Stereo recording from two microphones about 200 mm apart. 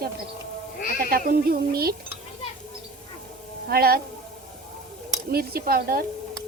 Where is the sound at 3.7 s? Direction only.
50° right (ahead or behind).